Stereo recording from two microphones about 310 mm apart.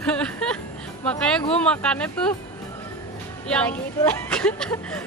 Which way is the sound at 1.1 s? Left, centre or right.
Centre.